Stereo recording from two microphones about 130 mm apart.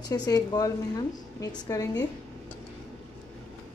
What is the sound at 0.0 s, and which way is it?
A woman's voice, 30° left (ahead or behind).